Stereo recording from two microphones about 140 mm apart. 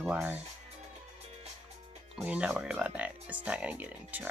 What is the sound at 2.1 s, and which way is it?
Speech, 5° right (ahead or behind).